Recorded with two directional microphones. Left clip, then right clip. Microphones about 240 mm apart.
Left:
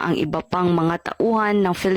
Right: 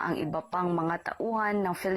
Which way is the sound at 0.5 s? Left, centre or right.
Left.